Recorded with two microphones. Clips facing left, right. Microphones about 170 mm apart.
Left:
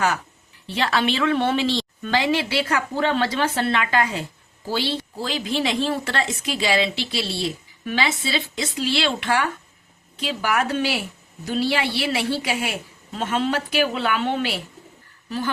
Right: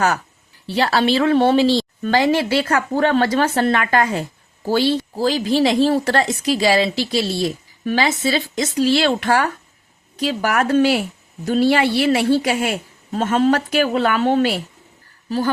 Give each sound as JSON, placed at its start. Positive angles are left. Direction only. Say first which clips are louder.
{"t": 0.7, "sound": "speech", "louder": "right 5 dB", "side_deg": -35}